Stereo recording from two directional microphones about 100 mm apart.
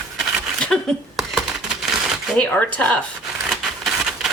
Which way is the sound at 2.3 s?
15° left (ahead or behind).